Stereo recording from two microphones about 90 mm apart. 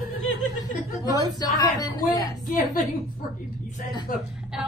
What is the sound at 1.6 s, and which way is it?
Speech, 45° left (ahead or behind).